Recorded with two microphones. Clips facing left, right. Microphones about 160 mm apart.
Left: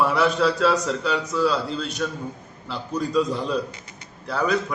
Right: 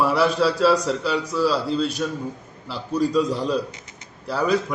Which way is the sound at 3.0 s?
30° right (ahead or behind).